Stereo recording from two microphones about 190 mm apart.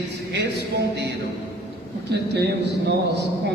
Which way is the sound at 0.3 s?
60° right (ahead or behind).